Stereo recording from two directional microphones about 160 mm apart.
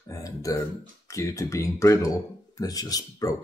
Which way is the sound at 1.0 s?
20° left (ahead or behind).